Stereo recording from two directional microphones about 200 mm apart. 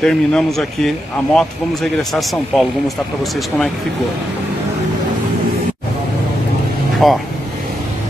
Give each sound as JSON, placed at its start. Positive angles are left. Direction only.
{"t": 0.0, "sound": "a man's voice", "side_deg": 5}
{"t": 7.0, "sound": "a man's voice", "side_deg": 0}